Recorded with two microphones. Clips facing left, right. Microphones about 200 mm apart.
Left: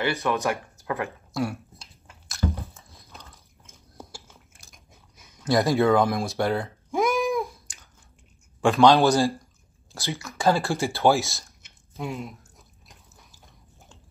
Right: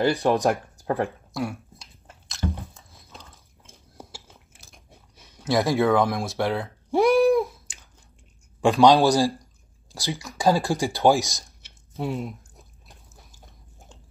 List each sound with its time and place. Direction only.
0.0 s speech: 35° right (ahead or behind)
1.3 s a sound: centre (ahead or behind)
2.9 s biting: centre (ahead or behind)
4.7 s biting: 30° right (ahead or behind)
5.4 s speech: centre (ahead or behind)
6.9 s a sound: 35° right (ahead or behind)
7.2 s a sound: centre (ahead or behind)
8.5 s speech: 15° right (ahead or behind)
12.0 s speech: 30° right (ahead or behind)